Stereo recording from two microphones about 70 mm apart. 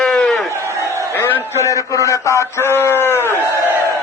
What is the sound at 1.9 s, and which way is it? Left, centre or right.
Speech, left.